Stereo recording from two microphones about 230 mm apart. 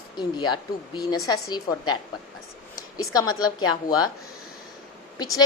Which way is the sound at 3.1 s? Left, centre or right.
Centre.